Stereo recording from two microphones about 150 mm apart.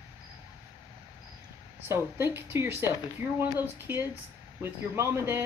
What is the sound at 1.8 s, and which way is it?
Speech, 15° right (ahead or behind).